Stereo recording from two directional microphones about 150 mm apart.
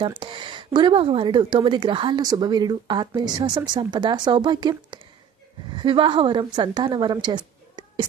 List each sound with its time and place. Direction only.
0.0 s a woman's voice: 35° right (ahead or behind)